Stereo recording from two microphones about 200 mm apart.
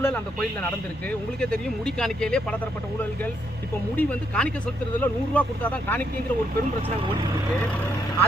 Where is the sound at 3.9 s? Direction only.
5° left (ahead or behind).